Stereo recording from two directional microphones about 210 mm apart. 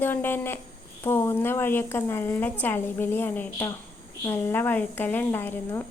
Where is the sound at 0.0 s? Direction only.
10° left (ahead or behind).